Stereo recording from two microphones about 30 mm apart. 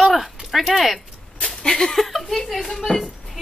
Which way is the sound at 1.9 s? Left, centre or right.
Centre.